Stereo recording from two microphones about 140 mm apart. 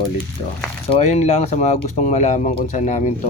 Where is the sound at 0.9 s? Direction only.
50° left (ahead or behind).